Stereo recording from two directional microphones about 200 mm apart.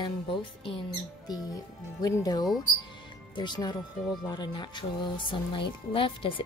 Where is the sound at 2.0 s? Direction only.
20° left (ahead or behind).